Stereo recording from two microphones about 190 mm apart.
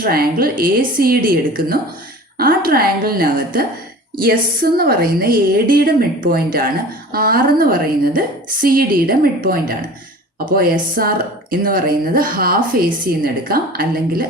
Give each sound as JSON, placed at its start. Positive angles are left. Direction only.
{"t": 0.0, "sound": "a woman's voice", "side_deg": -50}